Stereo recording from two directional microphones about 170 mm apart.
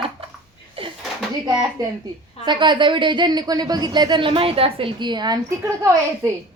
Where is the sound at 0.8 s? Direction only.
35° right (ahead or behind).